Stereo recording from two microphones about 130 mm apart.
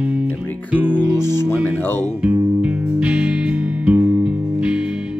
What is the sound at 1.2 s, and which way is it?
Music, 20° left (ahead or behind).